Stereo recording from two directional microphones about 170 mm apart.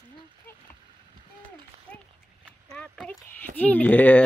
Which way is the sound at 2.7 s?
5° left (ahead or behind).